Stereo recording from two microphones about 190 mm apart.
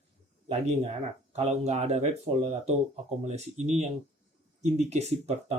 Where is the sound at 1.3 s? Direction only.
35° right (ahead or behind).